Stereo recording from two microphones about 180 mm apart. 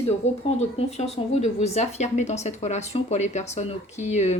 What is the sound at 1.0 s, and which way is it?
Speech, 35° left (ahead or behind).